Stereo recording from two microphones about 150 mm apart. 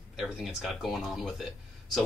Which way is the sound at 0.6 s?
Centre (ahead or behind).